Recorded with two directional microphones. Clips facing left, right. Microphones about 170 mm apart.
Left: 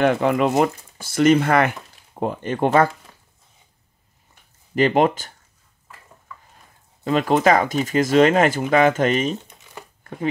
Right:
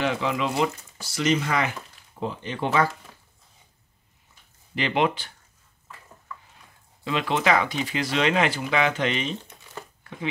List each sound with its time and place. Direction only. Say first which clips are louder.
0.0 s speech: left 8 dB; 55° left (ahead or behind)
4.7 s speech: left 7 dB; 45° left (ahead or behind)
7.1 s speech: left 6 dB; 45° left (ahead or behind)